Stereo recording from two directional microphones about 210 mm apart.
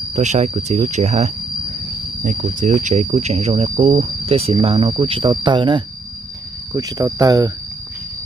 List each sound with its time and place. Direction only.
0.1 s speech: 35° right (ahead or behind)
2.6 s speech: 35° right (ahead or behind); by 7.5 s 15° right (ahead or behind)